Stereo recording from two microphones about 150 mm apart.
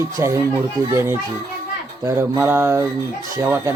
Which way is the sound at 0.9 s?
15° right (ahead or behind).